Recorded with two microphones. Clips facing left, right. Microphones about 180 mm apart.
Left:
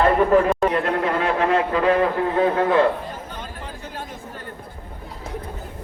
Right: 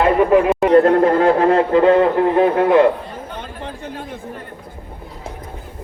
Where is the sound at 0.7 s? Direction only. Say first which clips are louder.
Right 10 dB; 35° right (ahead or behind); by 2.8 s 15° right (ahead or behind).